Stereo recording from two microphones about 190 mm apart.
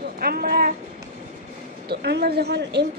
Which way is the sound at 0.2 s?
55° right (ahead or behind).